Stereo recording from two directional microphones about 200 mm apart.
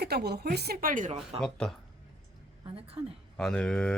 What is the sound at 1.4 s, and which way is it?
Speech, 5° left (ahead or behind).